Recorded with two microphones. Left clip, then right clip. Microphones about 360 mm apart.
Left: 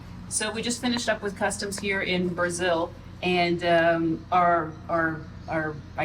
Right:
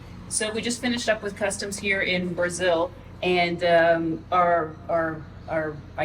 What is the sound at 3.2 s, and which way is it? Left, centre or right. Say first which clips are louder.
A woman's voice: right 2 dB; centre.